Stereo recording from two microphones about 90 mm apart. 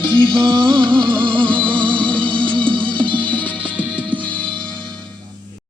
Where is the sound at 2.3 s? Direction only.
65° right (ahead or behind).